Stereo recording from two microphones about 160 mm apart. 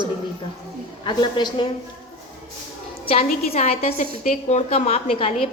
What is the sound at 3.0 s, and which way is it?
A woman's voice, 35° left (ahead or behind).